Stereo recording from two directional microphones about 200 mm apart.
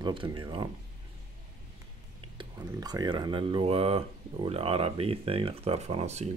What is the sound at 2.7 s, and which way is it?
Speech, 20° right (ahead or behind).